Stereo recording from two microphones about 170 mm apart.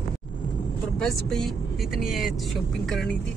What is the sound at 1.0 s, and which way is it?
Speech, centre (ahead or behind).